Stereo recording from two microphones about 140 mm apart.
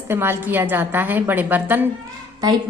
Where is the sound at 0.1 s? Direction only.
15° right (ahead or behind).